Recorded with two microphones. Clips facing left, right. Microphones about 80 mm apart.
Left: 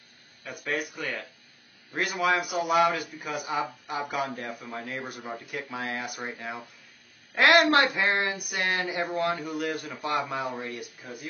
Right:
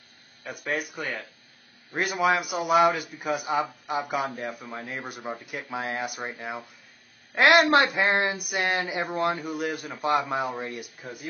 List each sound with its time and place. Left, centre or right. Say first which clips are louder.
0.4 s speech: right 1 dB; centre
2.3 s speech: right 2 dB; centre; by 11.2 s right